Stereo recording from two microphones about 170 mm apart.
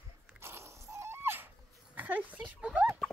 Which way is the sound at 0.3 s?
15° right (ahead or behind).